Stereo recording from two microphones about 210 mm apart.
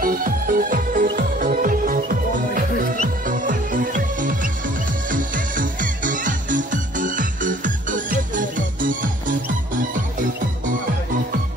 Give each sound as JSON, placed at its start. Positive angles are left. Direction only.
{"t": 0.0, "sound": "music", "side_deg": -45}